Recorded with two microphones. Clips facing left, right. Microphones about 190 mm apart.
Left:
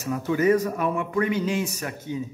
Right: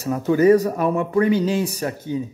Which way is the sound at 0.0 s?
35° right (ahead or behind).